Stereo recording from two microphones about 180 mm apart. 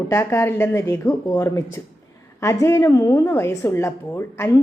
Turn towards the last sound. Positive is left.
turn(degrees=15)  # may be behind; listen again after turning